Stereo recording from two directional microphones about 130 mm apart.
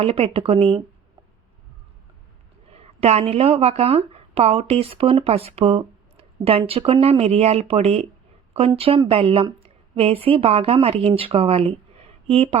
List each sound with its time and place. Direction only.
0.0 s speech: 50° right (ahead or behind)
2.7 s a woman's voice: 50° right (ahead or behind)